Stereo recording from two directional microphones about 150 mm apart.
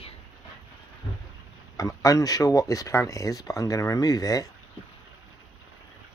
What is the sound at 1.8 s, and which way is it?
Speech, 20° left (ahead or behind).